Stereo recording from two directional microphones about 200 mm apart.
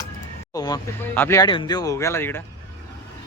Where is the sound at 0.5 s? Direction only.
20° left (ahead or behind).